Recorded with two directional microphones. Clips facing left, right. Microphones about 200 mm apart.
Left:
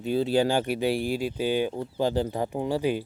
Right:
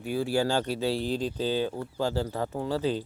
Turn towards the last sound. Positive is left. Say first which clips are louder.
# left 2 dB
turn(degrees=15)  # may be behind; listen again after turning